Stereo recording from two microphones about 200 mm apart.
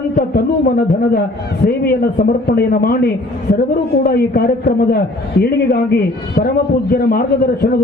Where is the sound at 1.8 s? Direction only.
50° left (ahead or behind).